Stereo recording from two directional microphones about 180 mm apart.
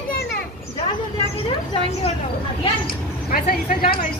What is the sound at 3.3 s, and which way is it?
Speech, 50° left (ahead or behind).